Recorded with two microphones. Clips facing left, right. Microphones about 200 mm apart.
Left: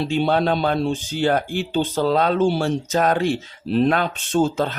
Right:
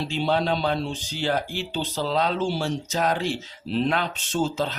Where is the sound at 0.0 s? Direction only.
55° left (ahead or behind).